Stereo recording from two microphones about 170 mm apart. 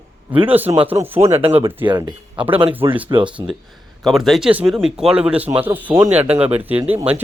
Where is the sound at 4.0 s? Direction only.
Centre (ahead or behind).